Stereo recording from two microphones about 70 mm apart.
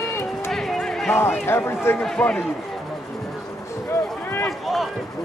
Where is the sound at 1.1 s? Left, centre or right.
Left.